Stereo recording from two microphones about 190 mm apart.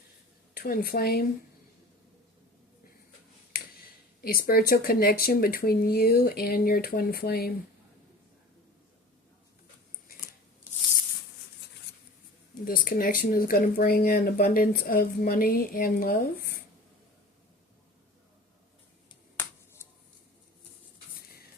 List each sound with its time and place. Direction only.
0.5 s speech: 50° left (ahead or behind)
4.2 s speech: 50° left (ahead or behind)
12.6 s speech: 50° left (ahead or behind)